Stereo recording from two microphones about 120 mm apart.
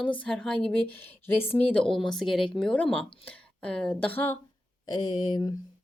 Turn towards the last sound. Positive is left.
turn(degrees=35)  # may be behind; listen again after turning